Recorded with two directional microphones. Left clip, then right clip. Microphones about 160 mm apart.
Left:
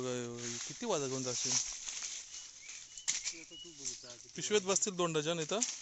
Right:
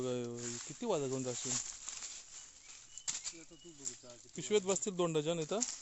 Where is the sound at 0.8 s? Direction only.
30° right (ahead or behind).